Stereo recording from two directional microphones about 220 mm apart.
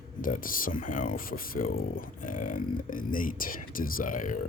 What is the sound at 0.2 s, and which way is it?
Speech, 40° left (ahead or behind).